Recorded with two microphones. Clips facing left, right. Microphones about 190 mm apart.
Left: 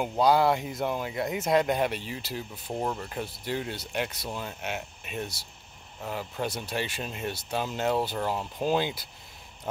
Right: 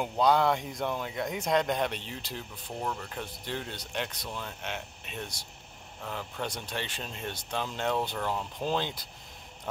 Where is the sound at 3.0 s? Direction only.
10° left (ahead or behind).